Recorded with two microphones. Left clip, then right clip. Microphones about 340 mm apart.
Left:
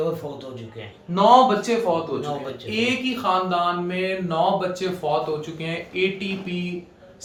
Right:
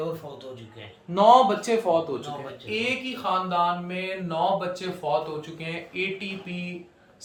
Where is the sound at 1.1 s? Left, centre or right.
Right.